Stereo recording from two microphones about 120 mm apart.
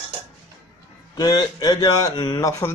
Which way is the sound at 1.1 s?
35° left (ahead or behind).